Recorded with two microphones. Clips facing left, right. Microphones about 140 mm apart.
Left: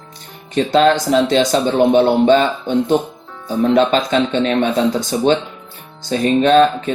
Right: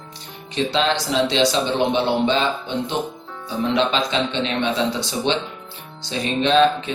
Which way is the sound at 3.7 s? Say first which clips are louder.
Left 6 dB; 45° left (ahead or behind).